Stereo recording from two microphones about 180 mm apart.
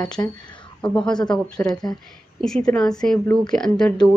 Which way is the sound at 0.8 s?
5° left (ahead or behind).